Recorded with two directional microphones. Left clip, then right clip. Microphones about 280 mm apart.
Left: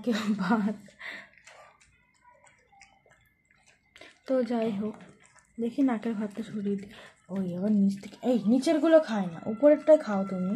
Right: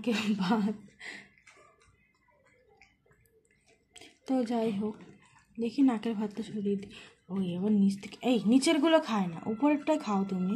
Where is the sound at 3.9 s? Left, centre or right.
Right.